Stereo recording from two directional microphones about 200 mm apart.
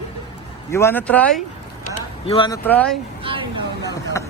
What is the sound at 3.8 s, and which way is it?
Speech, 15° left (ahead or behind).